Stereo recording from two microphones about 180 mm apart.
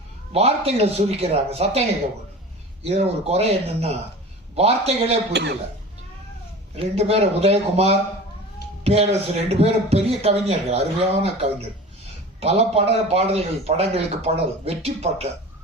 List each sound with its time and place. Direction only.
0.3 s a man's voice: 35° right (ahead or behind)
2.8 s a man's voice: 35° right (ahead or behind)
5.3 s speech: 70° right (ahead or behind)
6.7 s a man's voice: 35° right (ahead or behind)
8.8 s a sound: 35° right (ahead or behind)
9.5 s a man's voice: 35° right (ahead or behind)